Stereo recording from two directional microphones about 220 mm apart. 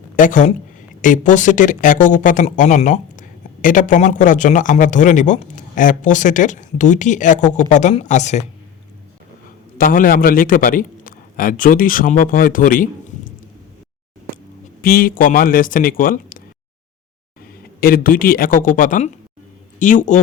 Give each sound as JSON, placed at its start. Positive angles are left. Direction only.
{"t": 0.2, "sound": "speech", "side_deg": 35}
{"t": 9.7, "sound": "speech", "side_deg": 40}
{"t": 14.8, "sound": "speech", "side_deg": 40}
{"t": 17.7, "sound": "speech", "side_deg": 40}